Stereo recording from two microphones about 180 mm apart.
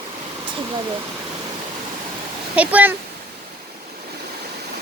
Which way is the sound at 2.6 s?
10° right (ahead or behind).